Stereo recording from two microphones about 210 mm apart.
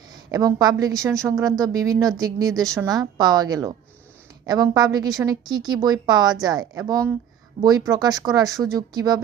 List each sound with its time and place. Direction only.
0.3 s speech: 15° right (ahead or behind)